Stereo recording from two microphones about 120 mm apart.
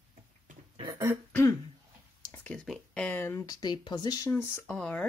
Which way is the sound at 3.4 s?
35° left (ahead or behind).